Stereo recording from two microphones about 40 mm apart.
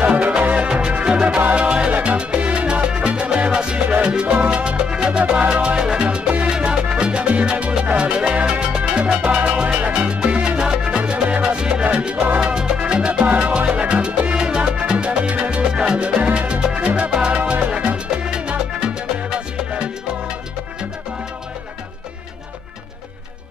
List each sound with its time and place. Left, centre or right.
0.0 s music: right
6.5 s salsa music: right
7.8 s music: right
14.4 s salsa music: right
15.6 s music: centre
16.2 s music: right